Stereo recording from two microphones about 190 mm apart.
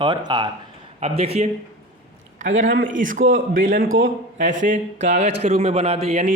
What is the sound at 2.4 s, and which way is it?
A man's voice, 40° right (ahead or behind).